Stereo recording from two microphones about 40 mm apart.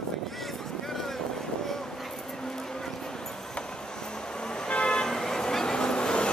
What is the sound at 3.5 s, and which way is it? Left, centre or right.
Vehicle, centre.